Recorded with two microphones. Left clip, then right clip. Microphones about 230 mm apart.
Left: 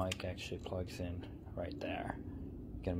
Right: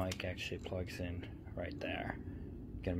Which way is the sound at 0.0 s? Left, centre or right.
Centre.